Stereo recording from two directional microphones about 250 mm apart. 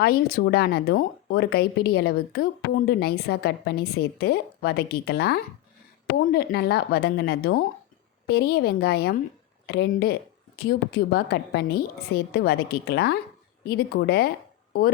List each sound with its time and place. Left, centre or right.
0.0 s speech: left